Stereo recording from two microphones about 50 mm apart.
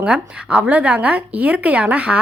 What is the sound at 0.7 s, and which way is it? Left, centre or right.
Speech, right.